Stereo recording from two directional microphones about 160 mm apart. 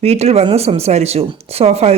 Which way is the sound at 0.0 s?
40° right (ahead or behind).